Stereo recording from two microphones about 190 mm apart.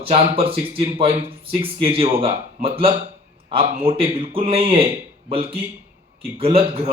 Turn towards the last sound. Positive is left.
turn(degrees=-30)  # may be behind; listen again after turning